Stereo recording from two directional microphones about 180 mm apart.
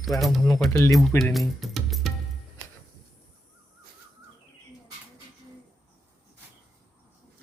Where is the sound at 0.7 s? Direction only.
15° left (ahead or behind).